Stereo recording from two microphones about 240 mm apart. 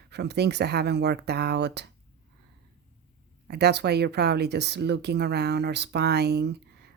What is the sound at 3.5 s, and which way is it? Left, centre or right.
Speech, right.